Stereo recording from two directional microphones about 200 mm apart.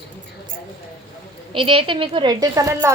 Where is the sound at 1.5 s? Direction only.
25° right (ahead or behind).